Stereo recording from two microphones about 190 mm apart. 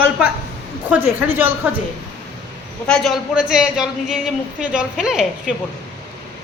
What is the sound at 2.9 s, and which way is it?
Speech, centre (ahead or behind).